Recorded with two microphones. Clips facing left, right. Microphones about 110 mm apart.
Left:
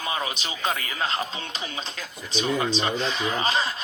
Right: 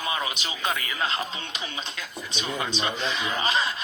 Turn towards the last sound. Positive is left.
turn(degrees=35)  # may be behind; listen again after turning